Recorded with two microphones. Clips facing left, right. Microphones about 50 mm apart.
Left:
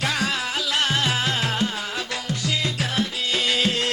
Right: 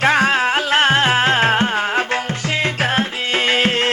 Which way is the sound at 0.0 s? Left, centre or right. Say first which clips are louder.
Right 10 dB; right.